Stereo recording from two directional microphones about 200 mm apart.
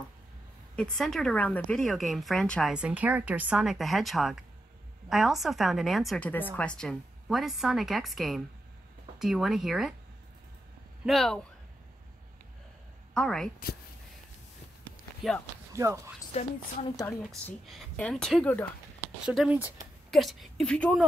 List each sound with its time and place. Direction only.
0.7 s a woman's voice: 5° left (ahead or behind)
11.1 s a woman's voice: centre (ahead or behind)
13.1 s a woman's voice: 5° left (ahead or behind)
15.2 s a woman's voice: centre (ahead or behind)
15.7 s speech: 15° right (ahead or behind)
16.3 s a woman's voice: 30° left (ahead or behind)
17.6 s a woman's voice: centre (ahead or behind)
19.2 s speech: 5° right (ahead or behind)